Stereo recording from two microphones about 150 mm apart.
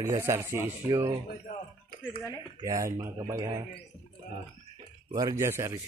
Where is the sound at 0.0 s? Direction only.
20° right (ahead or behind).